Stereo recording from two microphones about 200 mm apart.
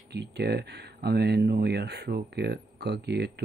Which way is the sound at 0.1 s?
55° right (ahead or behind).